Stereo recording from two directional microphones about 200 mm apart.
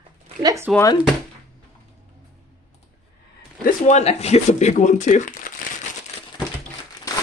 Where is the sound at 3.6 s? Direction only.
35° left (ahead or behind).